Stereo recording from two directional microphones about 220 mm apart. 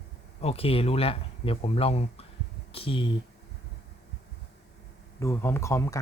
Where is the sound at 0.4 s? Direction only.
25° left (ahead or behind).